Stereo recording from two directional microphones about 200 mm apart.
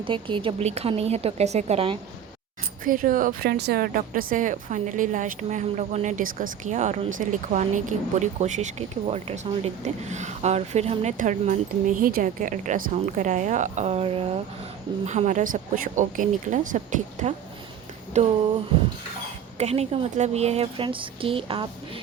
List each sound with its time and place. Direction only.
0.0 s speech: 25° right (ahead or behind)
2.8 s speech: 45° right (ahead or behind)
19.5 s a woman's voice: 30° right (ahead or behind)